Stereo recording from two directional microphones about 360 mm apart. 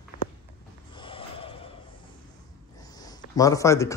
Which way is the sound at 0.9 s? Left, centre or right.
Centre.